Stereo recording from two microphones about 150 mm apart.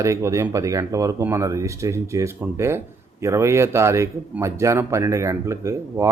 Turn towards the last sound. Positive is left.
turn(degrees=-20)  # may be behind; listen again after turning